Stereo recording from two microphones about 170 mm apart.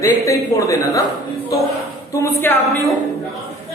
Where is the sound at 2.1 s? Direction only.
15° left (ahead or behind).